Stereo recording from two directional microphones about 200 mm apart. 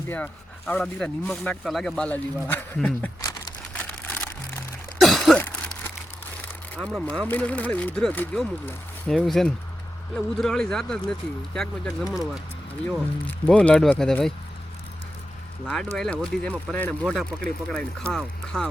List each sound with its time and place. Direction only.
0.1 s speech: 5° left (ahead or behind)
3.2 s crumpling: 20° left (ahead or behind)
3.7 s a sound: 5° left (ahead or behind)
6.7 s speech: 5° left (ahead or behind)
13.4 s speech: 5° left (ahead or behind)
15.6 s speech: 5° left (ahead or behind)